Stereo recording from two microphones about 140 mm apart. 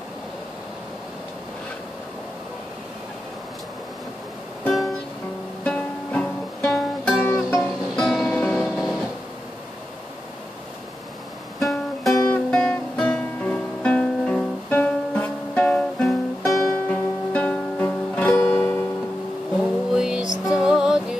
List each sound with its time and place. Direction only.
4.6 s music: centre (ahead or behind)
7.2 s music: 20° left (ahead or behind)
7.9 s music: 5° left (ahead or behind)
11.6 s music: centre (ahead or behind)
19.6 s music: 5° right (ahead or behind)